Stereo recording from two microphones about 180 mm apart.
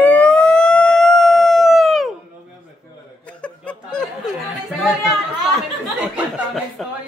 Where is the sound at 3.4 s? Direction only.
5° left (ahead or behind).